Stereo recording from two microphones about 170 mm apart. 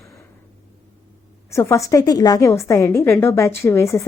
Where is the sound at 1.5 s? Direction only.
15° left (ahead or behind).